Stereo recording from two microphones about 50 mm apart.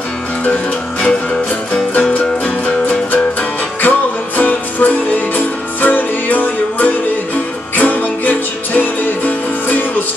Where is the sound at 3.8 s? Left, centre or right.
Left.